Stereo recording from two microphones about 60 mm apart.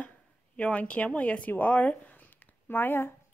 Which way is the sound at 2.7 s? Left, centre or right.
Left.